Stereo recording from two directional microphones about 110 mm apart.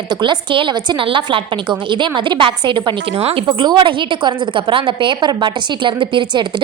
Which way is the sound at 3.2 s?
60° right (ahead or behind).